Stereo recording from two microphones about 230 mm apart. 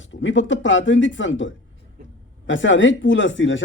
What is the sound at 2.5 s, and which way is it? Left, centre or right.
Speech, left.